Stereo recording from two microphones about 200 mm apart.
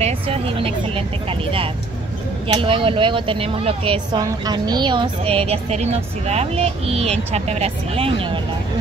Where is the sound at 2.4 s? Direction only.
25° right (ahead or behind).